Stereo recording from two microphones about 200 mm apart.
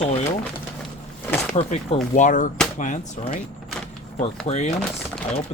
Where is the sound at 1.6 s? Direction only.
30° left (ahead or behind).